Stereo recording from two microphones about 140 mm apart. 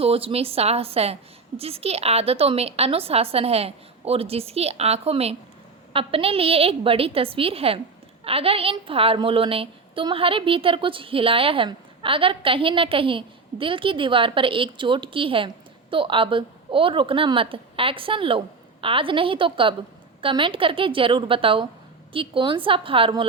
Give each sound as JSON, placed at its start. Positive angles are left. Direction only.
{"t": 0.0, "sound": "a woman's voice", "side_deg": -45}